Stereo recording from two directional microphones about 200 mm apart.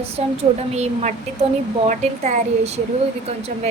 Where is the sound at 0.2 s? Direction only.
35° right (ahead or behind).